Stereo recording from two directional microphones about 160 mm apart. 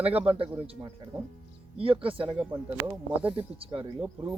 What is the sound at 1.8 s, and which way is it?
Speech, 35° right (ahead or behind).